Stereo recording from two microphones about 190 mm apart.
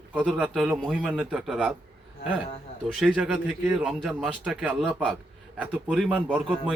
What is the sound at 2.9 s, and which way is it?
A man's voice, 5° right (ahead or behind).